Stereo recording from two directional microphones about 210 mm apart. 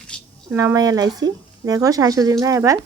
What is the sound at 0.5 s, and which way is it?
A woman's voice, 15° right (ahead or behind).